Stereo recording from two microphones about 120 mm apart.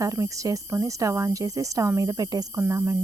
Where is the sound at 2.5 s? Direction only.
20° right (ahead or behind).